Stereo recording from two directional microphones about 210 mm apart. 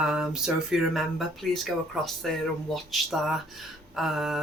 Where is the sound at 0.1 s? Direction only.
5° right (ahead or behind).